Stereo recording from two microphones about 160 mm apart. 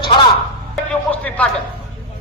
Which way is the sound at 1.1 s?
10° left (ahead or behind).